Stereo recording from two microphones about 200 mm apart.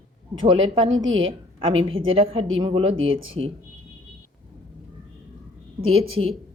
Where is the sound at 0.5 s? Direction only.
25° right (ahead or behind).